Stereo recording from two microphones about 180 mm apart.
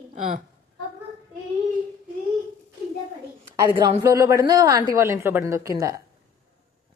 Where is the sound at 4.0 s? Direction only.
15° right (ahead or behind).